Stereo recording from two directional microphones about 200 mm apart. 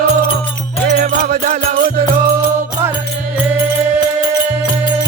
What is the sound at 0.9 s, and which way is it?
Music, 50° right (ahead or behind).